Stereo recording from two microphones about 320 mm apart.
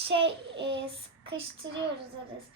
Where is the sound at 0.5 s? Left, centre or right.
Right.